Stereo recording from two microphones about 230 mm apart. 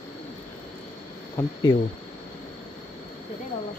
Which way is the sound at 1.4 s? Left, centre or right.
Centre.